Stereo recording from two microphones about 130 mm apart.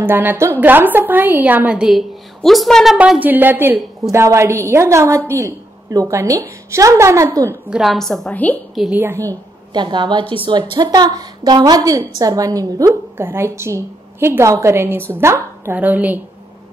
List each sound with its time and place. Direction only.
0.0 s a woman's voice: 15° right (ahead or behind); by 3.0 s centre (ahead or behind)
3.0 s a woman's voice: 10° right (ahead or behind)
7.7 s a woman's voice: centre (ahead or behind)
8.9 s a woman's voice: 20° right (ahead or behind)